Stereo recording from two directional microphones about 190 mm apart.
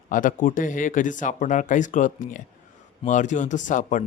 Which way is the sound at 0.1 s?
45° left (ahead or behind).